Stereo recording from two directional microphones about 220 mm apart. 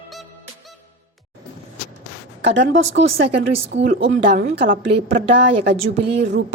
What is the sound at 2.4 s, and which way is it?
A woman's voice, 55° right (ahead or behind).